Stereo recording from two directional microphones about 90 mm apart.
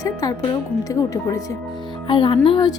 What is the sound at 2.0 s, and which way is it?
Speech, 65° left (ahead or behind).